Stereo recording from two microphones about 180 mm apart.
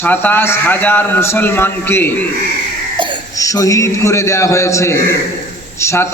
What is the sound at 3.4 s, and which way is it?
A man's voice, 20° left (ahead or behind).